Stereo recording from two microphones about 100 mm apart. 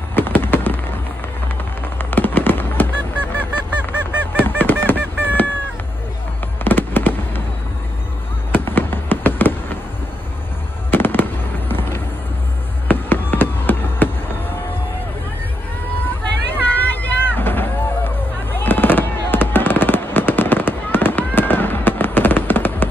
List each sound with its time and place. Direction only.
0.1 s a sound: 20° left (ahead or behind)
2.0 s honk: 20° left (ahead or behind)
6.6 s fireworks: 20° left (ahead or behind)
8.5 s fireworks: 20° left (ahead or behind)
10.9 s fireworks: 20° left (ahead or behind)
12.8 s a sound: 20° left (ahead or behind)
16.4 s vehicle: 20° left (ahead or behind)